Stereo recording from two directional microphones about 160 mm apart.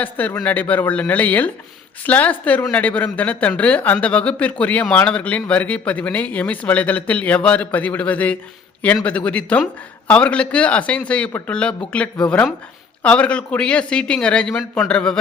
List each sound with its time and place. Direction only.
0.0 s speech: 10° left (ahead or behind)